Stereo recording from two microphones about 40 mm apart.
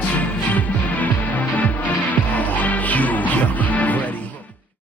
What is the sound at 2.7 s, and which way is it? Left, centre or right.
Music, left.